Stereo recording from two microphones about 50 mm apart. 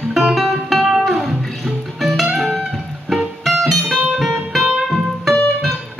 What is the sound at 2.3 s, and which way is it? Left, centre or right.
Music, centre.